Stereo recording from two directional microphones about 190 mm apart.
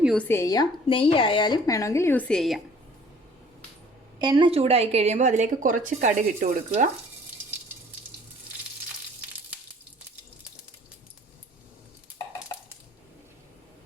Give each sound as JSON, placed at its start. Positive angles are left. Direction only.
{"t": 0.0, "sound": "a woman's voice", "side_deg": 0}
{"t": 0.3, "sound": "a woman's voice", "side_deg": 15}
{"t": 4.2, "sound": "speech", "side_deg": -25}